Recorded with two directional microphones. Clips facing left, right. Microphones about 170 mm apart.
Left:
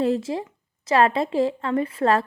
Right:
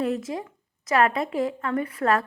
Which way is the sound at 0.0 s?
30° left (ahead or behind).